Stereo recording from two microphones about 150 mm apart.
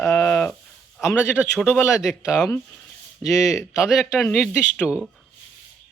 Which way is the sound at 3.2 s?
20° left (ahead or behind).